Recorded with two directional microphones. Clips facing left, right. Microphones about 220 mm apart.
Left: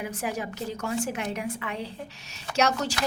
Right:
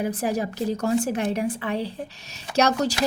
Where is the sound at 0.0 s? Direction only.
35° right (ahead or behind).